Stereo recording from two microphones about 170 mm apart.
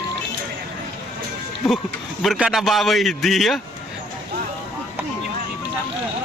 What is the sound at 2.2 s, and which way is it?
A man's voice, 5° right (ahead or behind).